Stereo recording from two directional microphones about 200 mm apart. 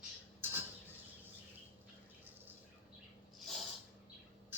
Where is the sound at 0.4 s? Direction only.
10° right (ahead or behind).